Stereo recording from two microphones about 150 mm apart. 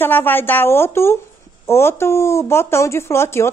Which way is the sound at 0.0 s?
15° left (ahead or behind).